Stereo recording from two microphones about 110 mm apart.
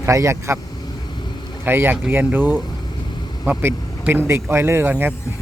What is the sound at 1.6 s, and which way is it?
Speech, 20° right (ahead or behind).